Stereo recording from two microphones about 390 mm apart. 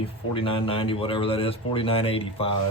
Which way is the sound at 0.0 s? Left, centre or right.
Centre.